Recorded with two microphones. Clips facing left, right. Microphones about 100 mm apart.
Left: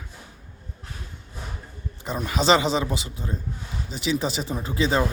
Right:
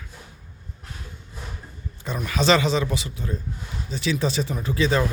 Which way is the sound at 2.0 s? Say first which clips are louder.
Even; 25° left (ahead or behind).